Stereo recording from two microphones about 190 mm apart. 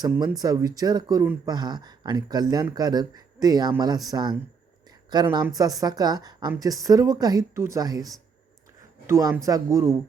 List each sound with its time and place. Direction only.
0.0 s speech: 15° right (ahead or behind)
5.5 s speech: 20° right (ahead or behind)